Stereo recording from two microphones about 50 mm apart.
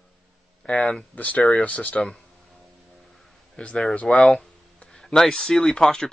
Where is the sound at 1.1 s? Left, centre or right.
Left.